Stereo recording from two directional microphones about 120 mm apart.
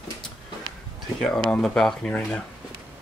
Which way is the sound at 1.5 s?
5° left (ahead or behind).